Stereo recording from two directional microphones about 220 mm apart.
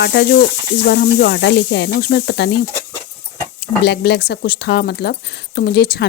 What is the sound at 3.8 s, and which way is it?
Speech, 50° left (ahead or behind).